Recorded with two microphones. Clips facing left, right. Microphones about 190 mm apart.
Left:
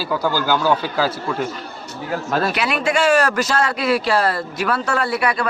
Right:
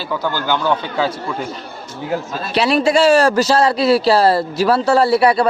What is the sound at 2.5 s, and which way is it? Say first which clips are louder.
A man's voice: right 6 dB; 30° right (ahead or behind).